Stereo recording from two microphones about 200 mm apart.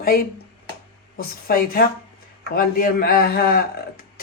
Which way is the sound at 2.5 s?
45° left (ahead or behind).